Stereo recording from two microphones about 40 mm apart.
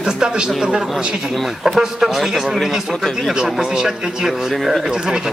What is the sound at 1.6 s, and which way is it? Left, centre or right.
Speech, centre.